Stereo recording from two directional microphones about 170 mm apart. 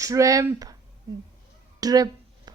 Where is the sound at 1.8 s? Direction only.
20° right (ahead or behind).